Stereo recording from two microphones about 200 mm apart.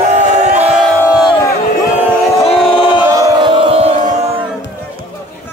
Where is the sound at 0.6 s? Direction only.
5° right (ahead or behind).